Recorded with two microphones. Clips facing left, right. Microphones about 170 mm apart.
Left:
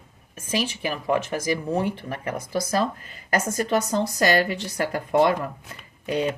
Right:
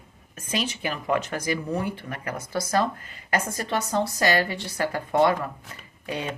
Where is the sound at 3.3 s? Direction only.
40° left (ahead or behind).